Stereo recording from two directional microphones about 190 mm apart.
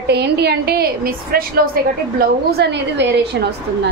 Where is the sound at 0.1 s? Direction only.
60° right (ahead or behind).